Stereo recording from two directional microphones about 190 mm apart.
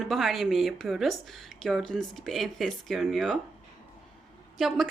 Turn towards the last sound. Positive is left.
turn(degrees=0)  # may be behind; listen again after turning